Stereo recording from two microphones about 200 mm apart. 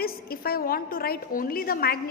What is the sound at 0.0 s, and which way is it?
A woman's voice, 50° left (ahead or behind).